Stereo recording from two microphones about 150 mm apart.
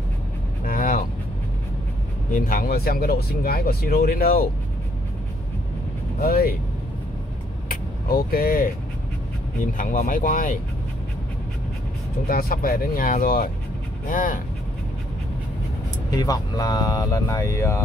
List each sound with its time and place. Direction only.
0.7 s vehicle: 70° left (ahead or behind)
2.3 s speech: 70° left (ahead or behind)
6.2 s speech: 90° left
7.6 s vehicle: 75° left (ahead or behind)
9.8 s speech: 60° left (ahead or behind)
12.3 s speech: 80° left; by 14.4 s 65° left (ahead or behind)
16.1 s speech: 25° left (ahead or behind)